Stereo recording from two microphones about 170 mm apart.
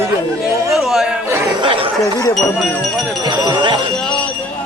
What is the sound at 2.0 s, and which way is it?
Speech, 20° left (ahead or behind).